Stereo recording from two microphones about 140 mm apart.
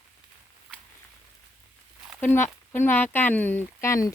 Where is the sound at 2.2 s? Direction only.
15° left (ahead or behind).